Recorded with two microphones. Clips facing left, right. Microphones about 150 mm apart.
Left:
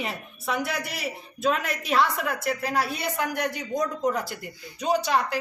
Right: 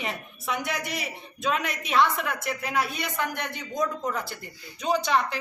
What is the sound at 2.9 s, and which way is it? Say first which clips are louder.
Speech: left 2 dB; 40° left (ahead or behind).